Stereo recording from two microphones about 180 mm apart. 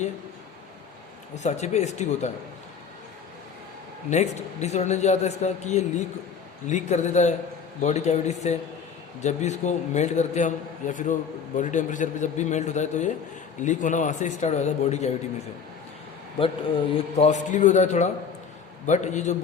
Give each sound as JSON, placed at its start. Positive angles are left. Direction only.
{"t": 1.4, "sound": "a man's voice", "side_deg": 40}
{"t": 4.1, "sound": "a man's voice", "side_deg": 40}
{"t": 16.4, "sound": "a man's voice", "side_deg": 30}